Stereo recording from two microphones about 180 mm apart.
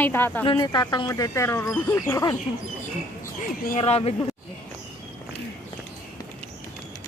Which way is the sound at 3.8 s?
35° left (ahead or behind).